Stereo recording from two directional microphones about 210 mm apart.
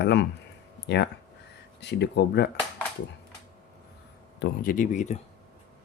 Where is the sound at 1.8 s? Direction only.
55° left (ahead or behind).